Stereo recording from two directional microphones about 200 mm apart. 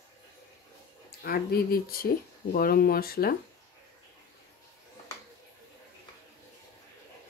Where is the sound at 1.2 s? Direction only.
50° left (ahead or behind).